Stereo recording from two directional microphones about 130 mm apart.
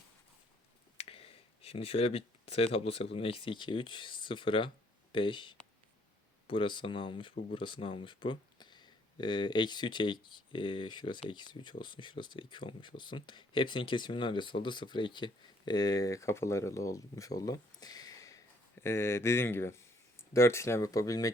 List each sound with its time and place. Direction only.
0.9 s speech: 50° left (ahead or behind); by 21.3 s 25° left (ahead or behind)